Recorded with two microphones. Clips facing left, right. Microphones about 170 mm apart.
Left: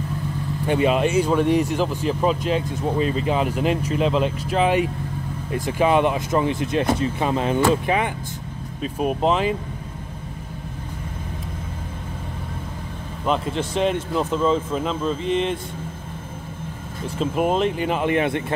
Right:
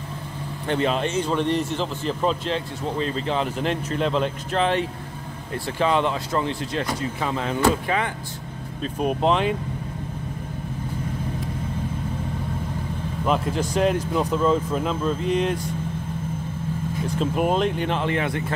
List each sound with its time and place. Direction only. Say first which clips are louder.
0.7 s speech: left 4 dB; 10° left (ahead or behind)
8.8 s speech: left 1 dB; 5° left (ahead or behind)
13.2 s speech: even; centre (ahead or behind)
17.2 s speech: left 2 dB; centre (ahead or behind)
18.1 s a man's voice: left 4 dB; 20° left (ahead or behind)